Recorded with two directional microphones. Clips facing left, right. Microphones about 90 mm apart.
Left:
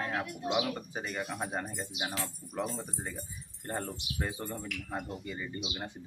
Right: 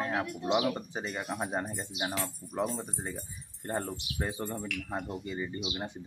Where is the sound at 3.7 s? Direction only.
20° right (ahead or behind).